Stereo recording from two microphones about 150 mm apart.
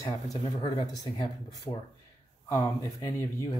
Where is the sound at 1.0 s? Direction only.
25° left (ahead or behind).